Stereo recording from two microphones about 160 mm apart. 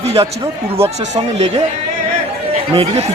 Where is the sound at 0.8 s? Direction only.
45° right (ahead or behind).